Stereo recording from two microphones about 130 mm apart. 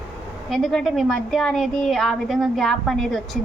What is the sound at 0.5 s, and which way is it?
A woman's voice, 5° left (ahead or behind).